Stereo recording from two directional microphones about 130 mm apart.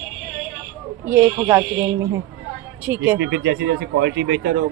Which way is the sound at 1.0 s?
15° right (ahead or behind).